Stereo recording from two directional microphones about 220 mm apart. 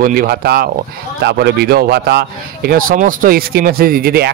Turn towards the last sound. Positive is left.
turn(degrees=-45)  # may be behind; listen again after turning